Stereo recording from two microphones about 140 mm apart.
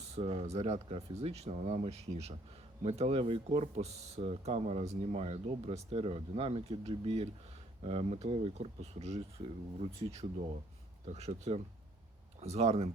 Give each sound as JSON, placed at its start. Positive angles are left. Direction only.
{"t": 0.2, "sound": "speech", "side_deg": -45}